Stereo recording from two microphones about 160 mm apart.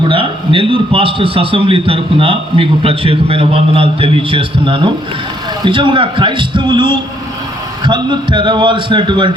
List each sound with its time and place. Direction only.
0.1 s a man's voice: 35° right (ahead or behind)